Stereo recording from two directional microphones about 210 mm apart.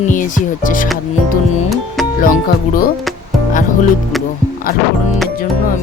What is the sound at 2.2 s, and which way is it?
Speech, 40° left (ahead or behind).